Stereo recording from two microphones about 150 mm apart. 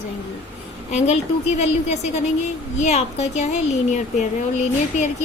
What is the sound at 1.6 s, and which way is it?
A woman's voice, 50° left (ahead or behind).